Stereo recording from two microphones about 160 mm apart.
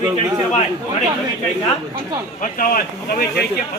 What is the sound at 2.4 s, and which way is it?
Speech, 60° left (ahead or behind).